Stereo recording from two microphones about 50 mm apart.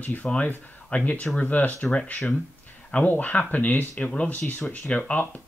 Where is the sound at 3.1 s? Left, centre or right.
Left.